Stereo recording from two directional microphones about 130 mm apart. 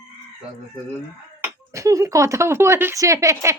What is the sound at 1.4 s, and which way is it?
Speech, 25° right (ahead or behind).